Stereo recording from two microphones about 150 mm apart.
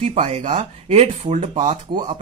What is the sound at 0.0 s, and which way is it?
Speech, 45° right (ahead or behind).